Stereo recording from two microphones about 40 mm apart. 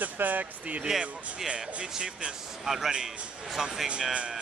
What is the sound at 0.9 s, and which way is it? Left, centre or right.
Speech, centre.